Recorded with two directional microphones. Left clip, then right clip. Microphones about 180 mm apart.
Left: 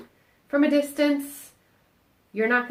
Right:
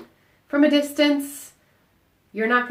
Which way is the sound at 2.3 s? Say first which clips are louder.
Right 2 dB; 30° left (ahead or behind).